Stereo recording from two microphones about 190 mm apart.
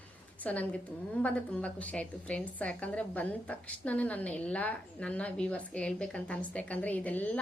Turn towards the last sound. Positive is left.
turn(degrees=10)  # may be behind; listen again after turning